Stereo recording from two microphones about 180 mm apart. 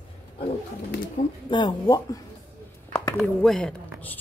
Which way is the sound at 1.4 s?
25° left (ahead or behind).